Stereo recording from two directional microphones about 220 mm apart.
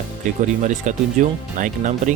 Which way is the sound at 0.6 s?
35° right (ahead or behind).